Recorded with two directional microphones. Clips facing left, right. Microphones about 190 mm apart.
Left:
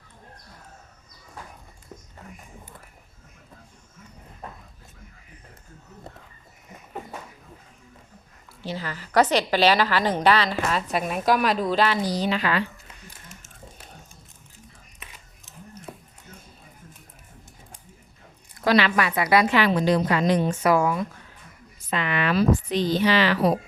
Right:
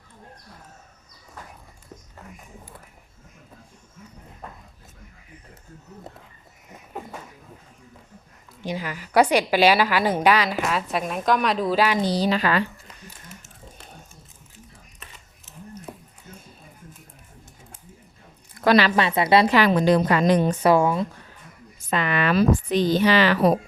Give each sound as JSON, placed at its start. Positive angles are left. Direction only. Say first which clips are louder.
{"t": 8.6, "sound": "a woman's voice", "louder": "right 2 dB", "side_deg": -15}
{"t": 12.0, "sound": "a woman's voice", "louder": "right 3 dB", "side_deg": -35}
{"t": 18.9, "sound": "speech", "louder": "right 2 dB", "side_deg": -25}
{"t": 20.5, "sound": "speech", "louder": "right 3 dB", "side_deg": -30}
{"t": 21.8, "sound": "speech", "louder": "right 2 dB", "side_deg": -40}